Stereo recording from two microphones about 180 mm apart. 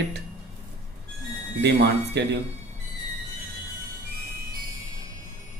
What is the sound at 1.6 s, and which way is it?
Speech, 75° right (ahead or behind).